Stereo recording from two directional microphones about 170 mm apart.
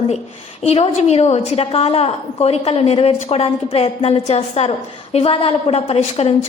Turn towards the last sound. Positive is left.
turn(degrees=35)  # may be behind; listen again after turning